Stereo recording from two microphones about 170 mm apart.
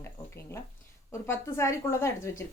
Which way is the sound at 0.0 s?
15° left (ahead or behind).